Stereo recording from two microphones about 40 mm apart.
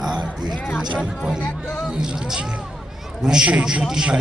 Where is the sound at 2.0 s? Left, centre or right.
Centre.